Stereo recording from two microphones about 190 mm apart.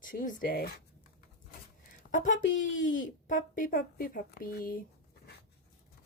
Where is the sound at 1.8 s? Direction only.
45° left (ahead or behind).